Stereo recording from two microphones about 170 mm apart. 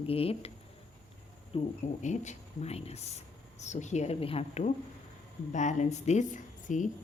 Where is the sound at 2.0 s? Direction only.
45° left (ahead or behind).